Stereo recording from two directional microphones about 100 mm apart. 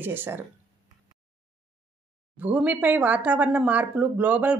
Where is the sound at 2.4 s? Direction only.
15° right (ahead or behind).